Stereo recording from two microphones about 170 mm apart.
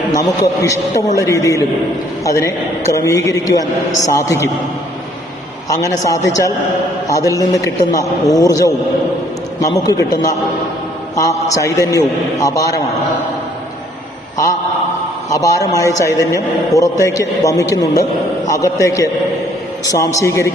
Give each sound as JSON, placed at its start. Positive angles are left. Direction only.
{"t": 0.1, "sound": "a man's voice", "side_deg": 20}
{"t": 5.6, "sound": "a man's voice", "side_deg": 20}
{"t": 15.3, "sound": "a man's voice", "side_deg": 20}